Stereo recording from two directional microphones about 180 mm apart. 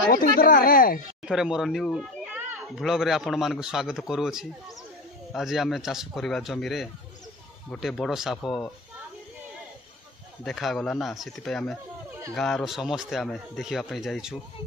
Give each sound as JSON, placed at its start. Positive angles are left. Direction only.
{"t": 0.4, "sound": "speech", "side_deg": 50}
{"t": 1.2, "sound": "speech", "side_deg": -5}
{"t": 10.4, "sound": "speech", "side_deg": 0}